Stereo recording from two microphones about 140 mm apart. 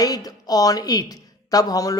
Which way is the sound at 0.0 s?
25° left (ahead or behind).